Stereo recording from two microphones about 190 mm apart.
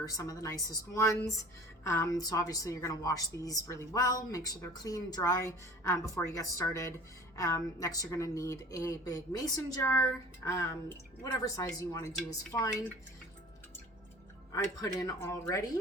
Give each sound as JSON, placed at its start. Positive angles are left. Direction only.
{"t": 0.0, "sound": "a woman's voice", "side_deg": 15}
{"t": 14.5, "sound": "a woman's voice", "side_deg": 15}